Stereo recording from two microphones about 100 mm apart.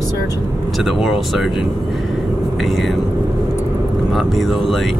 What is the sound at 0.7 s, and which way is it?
Speech, centre (ahead or behind).